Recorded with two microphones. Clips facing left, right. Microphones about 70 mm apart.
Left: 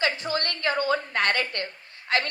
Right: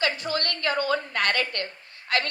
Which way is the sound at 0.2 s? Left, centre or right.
Left.